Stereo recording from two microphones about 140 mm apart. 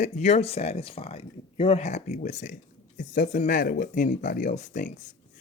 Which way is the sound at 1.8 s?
55° left (ahead or behind).